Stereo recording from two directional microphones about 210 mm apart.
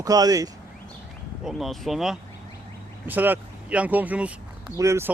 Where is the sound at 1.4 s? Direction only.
Centre (ahead or behind).